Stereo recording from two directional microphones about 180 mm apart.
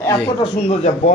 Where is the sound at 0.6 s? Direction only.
35° left (ahead or behind).